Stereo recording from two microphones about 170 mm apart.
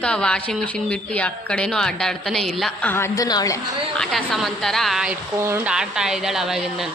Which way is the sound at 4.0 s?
Centre (ahead or behind).